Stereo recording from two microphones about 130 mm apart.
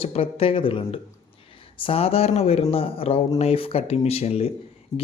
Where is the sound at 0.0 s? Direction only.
45° left (ahead or behind).